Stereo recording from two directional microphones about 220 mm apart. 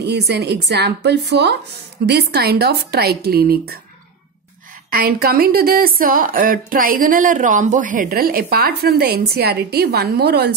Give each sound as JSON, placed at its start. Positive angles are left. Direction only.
{"t": 0.0, "sound": "a woman's voice", "side_deg": -50}
{"t": 4.9, "sound": "a woman's voice", "side_deg": -45}